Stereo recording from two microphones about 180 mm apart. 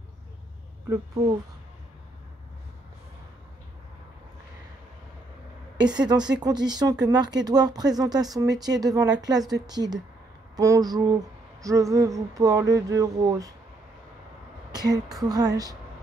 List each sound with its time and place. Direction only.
5.9 s speech: 25° right (ahead or behind)
14.7 s speech: 20° right (ahead or behind)